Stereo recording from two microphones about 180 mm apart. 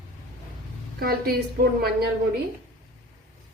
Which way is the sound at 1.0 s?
55° right (ahead or behind).